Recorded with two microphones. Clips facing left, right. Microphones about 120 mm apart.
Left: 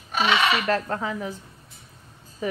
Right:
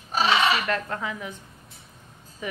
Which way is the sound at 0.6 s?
35° left (ahead or behind).